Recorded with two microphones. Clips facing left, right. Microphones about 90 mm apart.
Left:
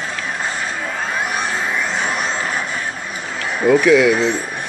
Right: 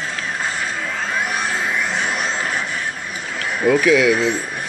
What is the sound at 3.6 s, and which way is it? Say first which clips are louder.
Speech: left 3 dB; centre (ahead or behind).